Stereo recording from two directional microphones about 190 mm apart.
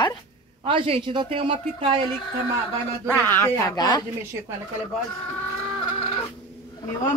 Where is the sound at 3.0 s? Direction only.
10° left (ahead or behind).